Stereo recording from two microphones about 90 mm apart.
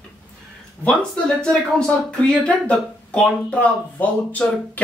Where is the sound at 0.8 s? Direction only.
10° left (ahead or behind).